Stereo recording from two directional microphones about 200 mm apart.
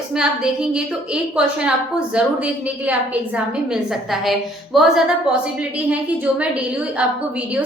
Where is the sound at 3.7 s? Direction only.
Centre (ahead or behind).